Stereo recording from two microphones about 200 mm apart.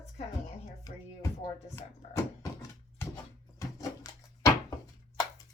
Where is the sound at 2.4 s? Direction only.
15° left (ahead or behind).